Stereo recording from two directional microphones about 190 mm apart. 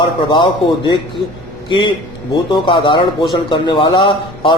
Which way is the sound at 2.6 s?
25° left (ahead or behind).